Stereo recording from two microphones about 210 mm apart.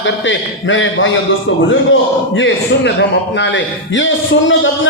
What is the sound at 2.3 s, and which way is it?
A man's voice, 60° left (ahead or behind).